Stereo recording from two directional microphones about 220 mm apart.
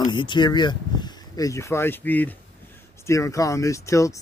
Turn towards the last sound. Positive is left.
turn(degrees=15)  # may be behind; listen again after turning